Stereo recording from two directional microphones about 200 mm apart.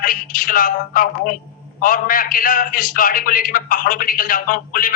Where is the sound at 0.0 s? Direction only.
45° left (ahead or behind).